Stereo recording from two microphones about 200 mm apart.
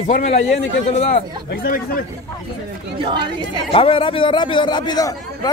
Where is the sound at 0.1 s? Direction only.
35° left (ahead or behind).